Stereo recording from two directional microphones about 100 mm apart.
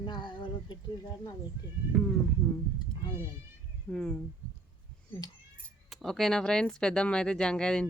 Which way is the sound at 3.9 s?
10° left (ahead or behind).